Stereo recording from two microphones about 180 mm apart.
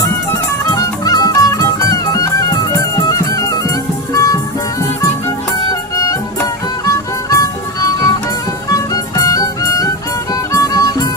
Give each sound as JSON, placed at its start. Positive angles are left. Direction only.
{"t": 0.7, "sound": "music", "side_deg": 20}
{"t": 6.8, "sound": "music", "side_deg": 15}